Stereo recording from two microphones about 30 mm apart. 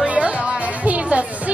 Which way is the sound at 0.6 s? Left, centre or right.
Right.